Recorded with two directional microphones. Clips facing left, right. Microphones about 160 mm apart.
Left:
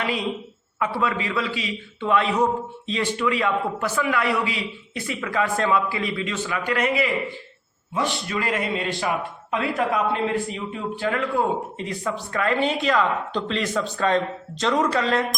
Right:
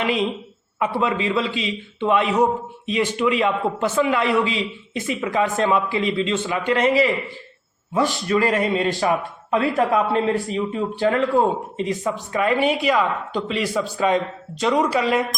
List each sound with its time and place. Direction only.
0.0 s a woman's voice: 20° right (ahead or behind)